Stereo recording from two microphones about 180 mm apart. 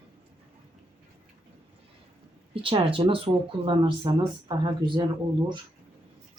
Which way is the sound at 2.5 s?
30° right (ahead or behind).